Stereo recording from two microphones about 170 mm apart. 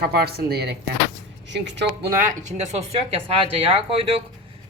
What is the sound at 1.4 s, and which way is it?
Speech, 90° right.